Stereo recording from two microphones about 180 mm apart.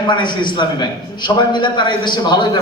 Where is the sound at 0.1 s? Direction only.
25° left (ahead or behind).